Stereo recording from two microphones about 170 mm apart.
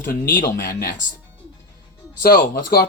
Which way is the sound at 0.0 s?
50° left (ahead or behind).